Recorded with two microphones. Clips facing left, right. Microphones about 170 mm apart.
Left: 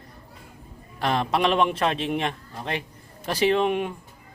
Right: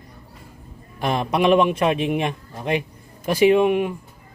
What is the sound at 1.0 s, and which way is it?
A man's voice, 15° right (ahead or behind).